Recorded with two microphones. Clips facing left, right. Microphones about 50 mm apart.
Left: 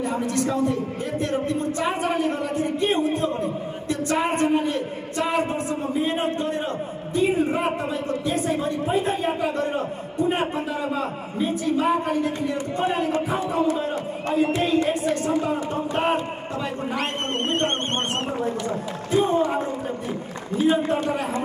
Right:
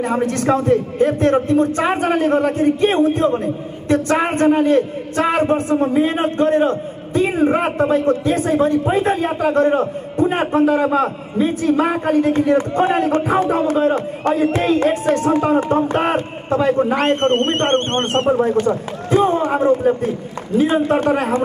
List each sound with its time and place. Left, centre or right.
0.0 s a man's voice: right
11.3 s a man's voice: right